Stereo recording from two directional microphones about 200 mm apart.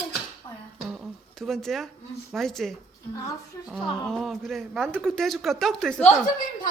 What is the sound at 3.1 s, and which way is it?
Speech, 15° left (ahead or behind).